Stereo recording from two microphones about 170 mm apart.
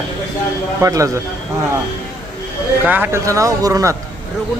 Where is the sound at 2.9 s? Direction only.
10° right (ahead or behind).